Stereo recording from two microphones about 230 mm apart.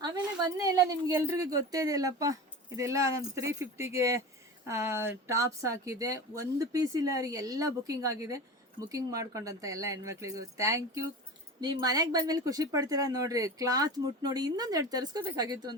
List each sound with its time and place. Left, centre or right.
0.0 s a woman's voice: centre